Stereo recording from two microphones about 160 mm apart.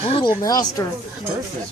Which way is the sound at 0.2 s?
25° left (ahead or behind).